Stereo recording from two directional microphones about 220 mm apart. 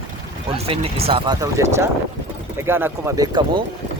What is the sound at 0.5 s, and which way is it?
Speech, 25° right (ahead or behind).